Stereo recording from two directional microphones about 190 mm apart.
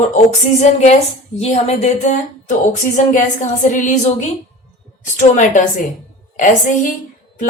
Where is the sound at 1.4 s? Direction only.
35° left (ahead or behind).